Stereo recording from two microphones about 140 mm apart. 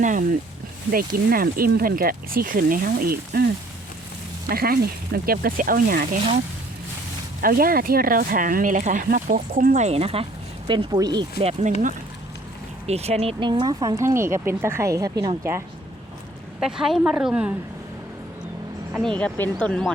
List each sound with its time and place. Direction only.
0.0 s speech: 65° right (ahead or behind)
0.9 s speech: 90° right
4.4 s speech: 90° right
7.4 s speech: 90° right; by 10.2 s 45° right (ahead or behind)
10.9 s a woman's voice: 30° right (ahead or behind)
11.3 s speech: 45° right (ahead or behind)
12.9 s speech: 50° right (ahead or behind)
13.4 s a woman's voice: 35° right (ahead or behind)
16.6 s a woman's voice: 5° right (ahead or behind)
18.9 s speech: 5° left (ahead or behind)